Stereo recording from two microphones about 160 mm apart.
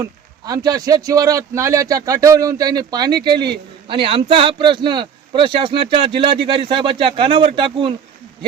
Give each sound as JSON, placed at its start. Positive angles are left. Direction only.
{"t": 0.0, "sound": "a man's voice", "side_deg": -25}